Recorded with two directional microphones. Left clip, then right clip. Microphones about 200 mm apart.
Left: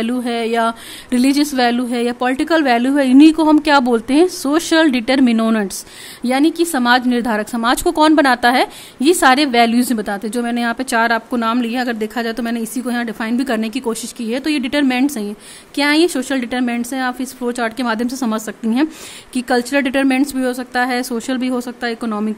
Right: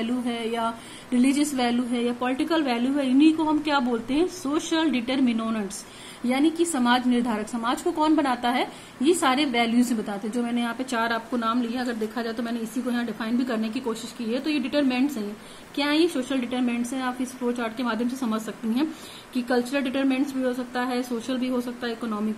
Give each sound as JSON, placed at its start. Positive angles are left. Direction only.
{"t": 0.0, "sound": "a woman's voice", "side_deg": 45}